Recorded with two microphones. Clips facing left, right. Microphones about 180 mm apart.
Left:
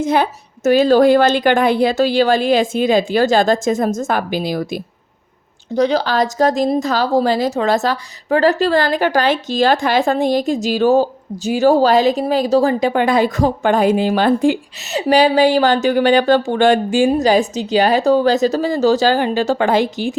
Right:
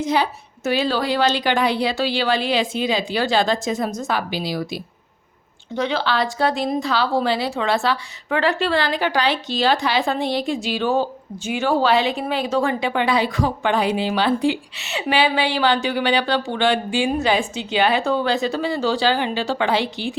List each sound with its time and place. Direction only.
0.0 s a woman's voice: 50° left (ahead or behind)